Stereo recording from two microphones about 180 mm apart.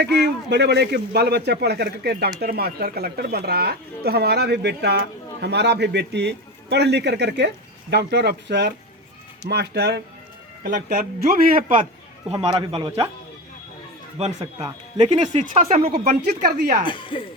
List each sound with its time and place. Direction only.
0.0 s a man's voice: 70° right (ahead or behind)
10.6 s speech: 45° right (ahead or behind)
10.8 s speech: 60° right (ahead or behind)
12.4 s a man's voice: 30° right (ahead or behind)
14.3 s speech: 20° right (ahead or behind)
15.1 s a man's voice: 40° right (ahead or behind)
15.9 s speech: 55° right (ahead or behind)
16.8 s speech: 25° left (ahead or behind)